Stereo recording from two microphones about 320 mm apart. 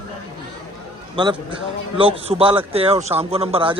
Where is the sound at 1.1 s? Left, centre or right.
Centre.